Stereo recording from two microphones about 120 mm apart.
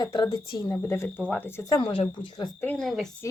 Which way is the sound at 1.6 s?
40° left (ahead or behind).